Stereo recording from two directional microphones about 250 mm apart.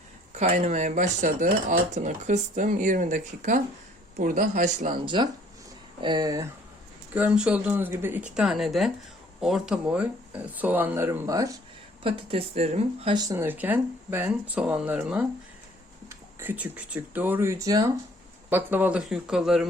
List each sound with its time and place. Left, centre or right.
0.3 s speech: right
7.1 s speech: centre